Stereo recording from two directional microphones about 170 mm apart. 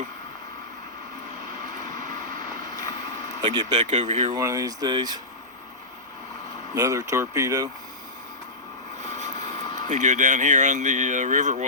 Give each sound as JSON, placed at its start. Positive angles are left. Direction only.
{"t": 1.7, "sound": "a sound", "side_deg": -50}
{"t": 3.4, "sound": "speech", "side_deg": -25}
{"t": 3.8, "sound": "speech", "side_deg": -45}
{"t": 4.3, "sound": "speech", "side_deg": -20}
{"t": 6.7, "sound": "speech", "side_deg": -20}
{"t": 9.0, "sound": "vehicle", "side_deg": -45}
{"t": 9.7, "sound": "speech", "side_deg": -45}